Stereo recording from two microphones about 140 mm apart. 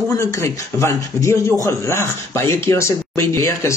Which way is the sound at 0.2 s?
20° left (ahead or behind).